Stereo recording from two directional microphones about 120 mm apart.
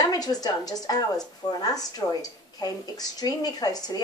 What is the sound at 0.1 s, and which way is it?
A woman's voice, 30° left (ahead or behind).